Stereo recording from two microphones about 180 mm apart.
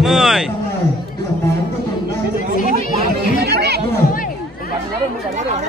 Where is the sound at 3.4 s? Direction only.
65° right (ahead or behind).